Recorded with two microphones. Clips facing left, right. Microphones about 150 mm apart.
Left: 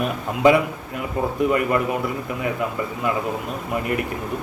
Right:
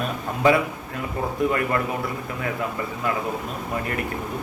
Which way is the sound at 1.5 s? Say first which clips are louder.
Left 3 dB; 15° left (ahead or behind).